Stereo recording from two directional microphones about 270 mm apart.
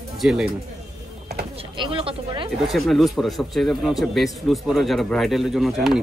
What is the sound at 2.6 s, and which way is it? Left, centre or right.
Speech, centre.